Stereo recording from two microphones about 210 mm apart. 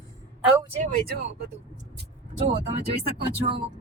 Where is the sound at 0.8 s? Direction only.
45° right (ahead or behind).